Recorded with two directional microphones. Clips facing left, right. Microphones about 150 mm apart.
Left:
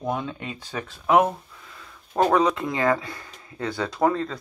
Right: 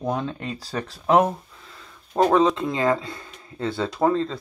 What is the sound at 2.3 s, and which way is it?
Speech, 25° right (ahead or behind).